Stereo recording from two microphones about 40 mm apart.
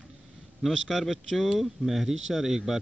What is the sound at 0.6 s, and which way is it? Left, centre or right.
Speech, centre.